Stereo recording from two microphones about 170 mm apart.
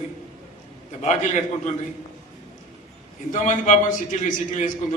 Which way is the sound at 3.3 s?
45° left (ahead or behind).